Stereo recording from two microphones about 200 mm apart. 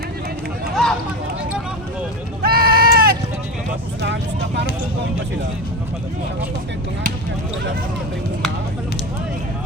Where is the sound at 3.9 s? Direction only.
60° right (ahead or behind).